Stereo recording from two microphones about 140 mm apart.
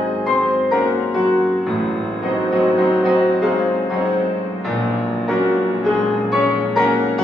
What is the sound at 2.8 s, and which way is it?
Music, centre (ahead or behind).